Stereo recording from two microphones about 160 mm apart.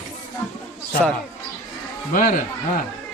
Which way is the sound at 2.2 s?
60° left (ahead or behind).